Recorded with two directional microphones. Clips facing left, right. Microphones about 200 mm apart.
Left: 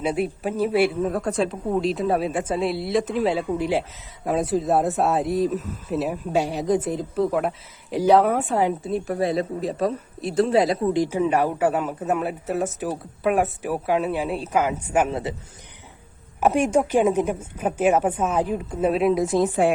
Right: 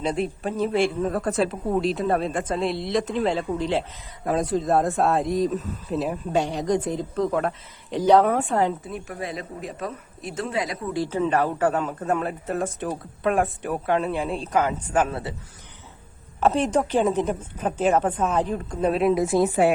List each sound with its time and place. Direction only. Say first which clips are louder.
0.0 s speech: left 2 dB; 5° left (ahead or behind)
8.8 s speech: left 9 dB; 30° left (ahead or behind)
10.9 s a man's voice: left 2 dB; 15° left (ahead or behind)
16.4 s a man's voice: left 2 dB; 10° left (ahead or behind); by 19.7 s 5° right (ahead or behind)